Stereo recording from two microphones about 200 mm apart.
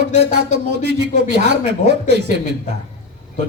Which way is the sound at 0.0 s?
55° right (ahead or behind).